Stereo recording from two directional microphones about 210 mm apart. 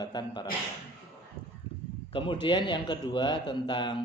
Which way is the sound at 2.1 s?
25° left (ahead or behind).